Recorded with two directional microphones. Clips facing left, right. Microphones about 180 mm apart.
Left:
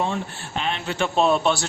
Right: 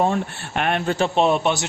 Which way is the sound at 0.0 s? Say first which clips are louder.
Right 5 dB; 55° right (ahead or behind).